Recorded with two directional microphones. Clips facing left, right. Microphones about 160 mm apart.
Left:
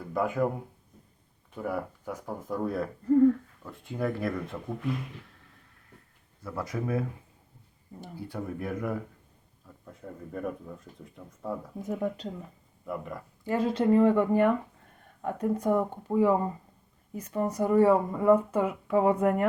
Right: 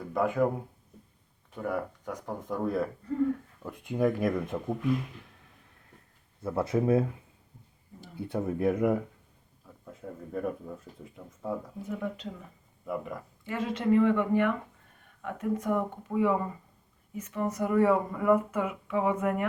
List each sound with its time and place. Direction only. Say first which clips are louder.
0.1 s speech: right 1 dB; centre (ahead or behind)
1.5 s speech: even; 5° left (ahead or behind)
3.6 s speech: right 5 dB; 15° right (ahead or behind)
6.4 s speech: right 6 dB; 25° right (ahead or behind)
8.2 s speech: right 7 dB; 20° right (ahead or behind)
9.6 s speech: right 1 dB; 5° right (ahead or behind)
11.8 s speech: left 3 dB; 40° left (ahead or behind)
12.8 s speech: right 1 dB; centre (ahead or behind)
13.4 s speech: left 5 dB; 35° left (ahead or behind)